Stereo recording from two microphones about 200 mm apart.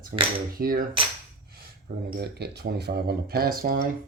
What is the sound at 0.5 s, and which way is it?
Speech, 45° right (ahead or behind).